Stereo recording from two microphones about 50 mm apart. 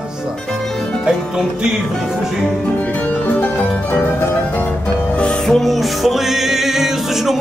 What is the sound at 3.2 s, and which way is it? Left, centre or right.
Music, left.